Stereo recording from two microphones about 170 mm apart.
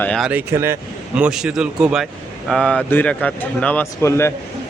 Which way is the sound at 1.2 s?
5° right (ahead or behind).